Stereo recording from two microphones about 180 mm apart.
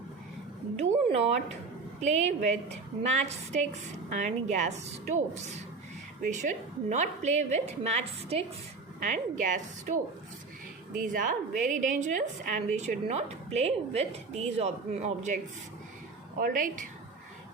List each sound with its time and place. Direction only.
0.8 s a woman's voice: 35° right (ahead or behind)
9.0 s a woman's voice: 45° right (ahead or behind)
16.4 s a woman's voice: 50° right (ahead or behind)